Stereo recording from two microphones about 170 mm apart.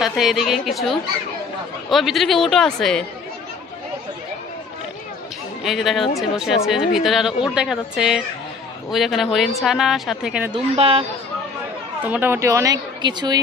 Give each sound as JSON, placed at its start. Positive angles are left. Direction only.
{"t": 0.0, "sound": "a woman's voice", "side_deg": 0}
{"t": 5.6, "sound": "a woman's voice", "side_deg": 0}
{"t": 10.5, "sound": "a woman's voice", "side_deg": -35}
{"t": 12.0, "sound": "a woman's voice", "side_deg": -10}